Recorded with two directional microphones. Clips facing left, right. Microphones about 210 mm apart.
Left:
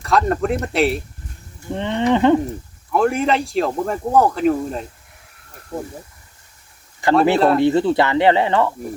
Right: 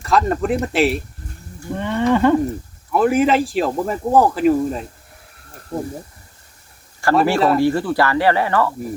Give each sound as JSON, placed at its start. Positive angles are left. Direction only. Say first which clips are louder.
{"t": 0.0, "sound": "speech", "louder": "even", "side_deg": 0}
{"t": 1.7, "sound": "speech", "louder": "even", "side_deg": 20}
{"t": 2.9, "sound": "speech", "louder": "right 2 dB", "side_deg": 0}
{"t": 7.0, "sound": "speech", "louder": "left 1 dB", "side_deg": 20}
{"t": 7.3, "sound": "speech", "louder": "left 1 dB", "side_deg": 0}
{"t": 7.6, "sound": "speech", "louder": "left 2 dB", "side_deg": 20}